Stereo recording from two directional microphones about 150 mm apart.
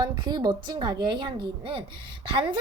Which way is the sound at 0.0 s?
30° right (ahead or behind).